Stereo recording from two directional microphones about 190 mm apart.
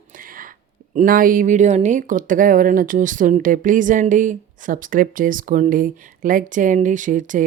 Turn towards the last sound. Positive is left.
turn(degrees=-45)  # may be behind; listen again after turning